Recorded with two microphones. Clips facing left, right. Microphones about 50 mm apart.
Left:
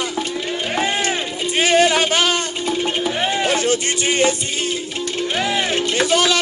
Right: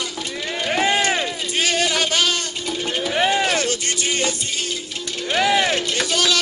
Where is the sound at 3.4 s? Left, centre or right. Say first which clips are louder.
Left 2 dB; left.